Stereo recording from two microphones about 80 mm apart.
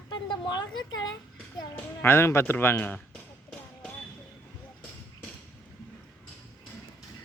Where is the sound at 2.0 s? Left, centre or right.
Left.